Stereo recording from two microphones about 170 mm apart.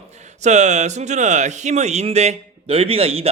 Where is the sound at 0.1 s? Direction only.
40° right (ahead or behind).